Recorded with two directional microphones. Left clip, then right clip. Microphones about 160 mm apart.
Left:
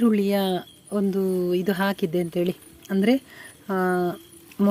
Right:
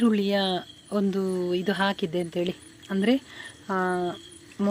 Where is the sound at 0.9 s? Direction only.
15° left (ahead or behind).